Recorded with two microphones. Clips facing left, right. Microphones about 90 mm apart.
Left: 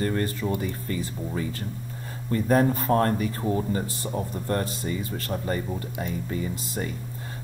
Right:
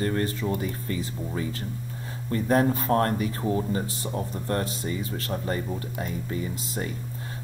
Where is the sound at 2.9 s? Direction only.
25° left (ahead or behind).